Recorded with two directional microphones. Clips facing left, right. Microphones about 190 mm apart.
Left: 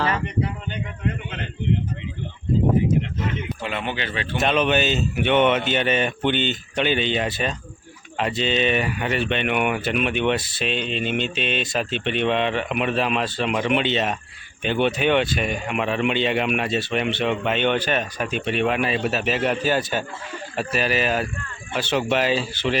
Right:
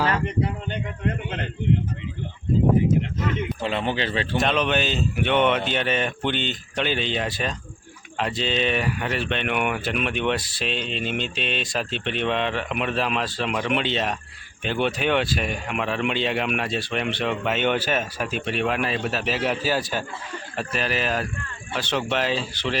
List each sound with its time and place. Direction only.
3.6 s speech: 30° right (ahead or behind)
4.4 s speech: 5° left (ahead or behind)